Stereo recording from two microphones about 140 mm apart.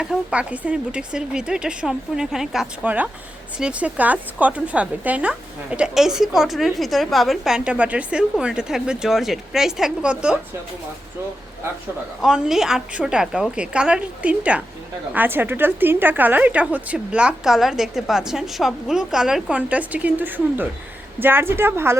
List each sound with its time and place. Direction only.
0.0 s a woman's voice: 5° right (ahead or behind)
12.2 s a woman's voice: 5° right (ahead or behind)